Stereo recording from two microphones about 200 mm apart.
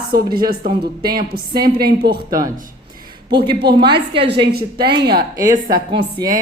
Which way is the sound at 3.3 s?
55° right (ahead or behind).